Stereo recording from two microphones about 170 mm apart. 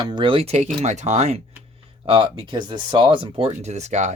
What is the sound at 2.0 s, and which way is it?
Speech, 30° right (ahead or behind).